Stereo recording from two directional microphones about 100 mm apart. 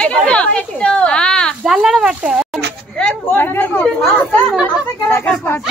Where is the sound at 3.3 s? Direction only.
20° left (ahead or behind).